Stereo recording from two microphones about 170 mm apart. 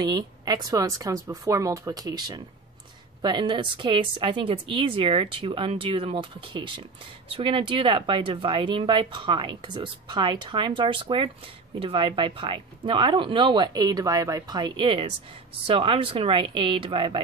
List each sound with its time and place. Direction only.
0.0 s a woman's voice: 25° right (ahead or behind)